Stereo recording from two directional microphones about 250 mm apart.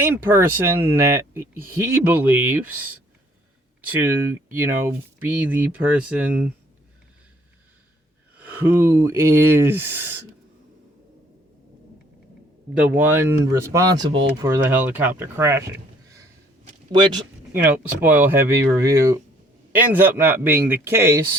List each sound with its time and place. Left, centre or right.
0.0 s speech: centre
8.4 s speech: centre
12.9 s speech: centre